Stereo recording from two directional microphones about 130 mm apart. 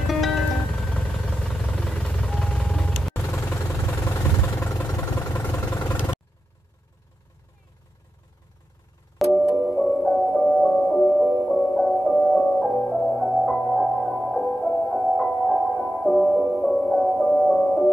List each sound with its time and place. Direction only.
0.0 s music: centre (ahead or behind)
3.3 s vehicle: 20° left (ahead or behind)
9.2 s music: centre (ahead or behind)
9.7 s music: 15° left (ahead or behind)